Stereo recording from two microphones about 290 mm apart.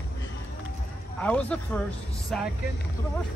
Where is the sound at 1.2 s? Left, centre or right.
Centre.